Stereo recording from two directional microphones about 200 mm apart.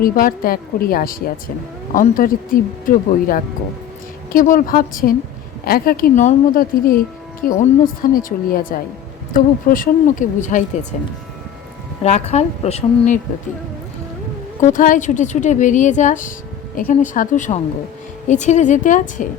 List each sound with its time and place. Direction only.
0.0 s a woman's voice: 45° left (ahead or behind)
14.6 s a woman's voice: 40° left (ahead or behind)